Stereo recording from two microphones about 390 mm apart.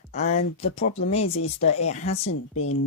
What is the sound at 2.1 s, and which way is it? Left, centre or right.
Speech, left.